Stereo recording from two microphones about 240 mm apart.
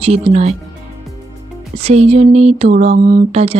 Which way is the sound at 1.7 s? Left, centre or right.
Right.